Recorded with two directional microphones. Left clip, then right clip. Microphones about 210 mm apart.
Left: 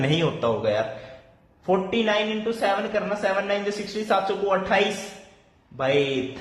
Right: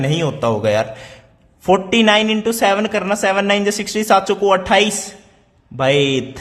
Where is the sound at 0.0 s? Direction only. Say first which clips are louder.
Right 5 dB; 25° right (ahead or behind).